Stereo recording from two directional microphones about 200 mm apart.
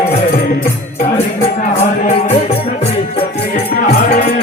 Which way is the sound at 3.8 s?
35° left (ahead or behind).